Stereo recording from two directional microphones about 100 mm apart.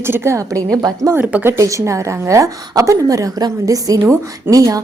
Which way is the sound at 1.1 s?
15° right (ahead or behind).